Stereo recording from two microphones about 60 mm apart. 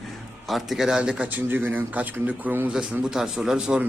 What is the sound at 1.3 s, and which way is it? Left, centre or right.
Speech, right.